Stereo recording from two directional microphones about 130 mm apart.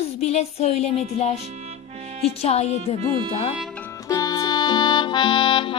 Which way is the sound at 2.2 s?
50° left (ahead or behind).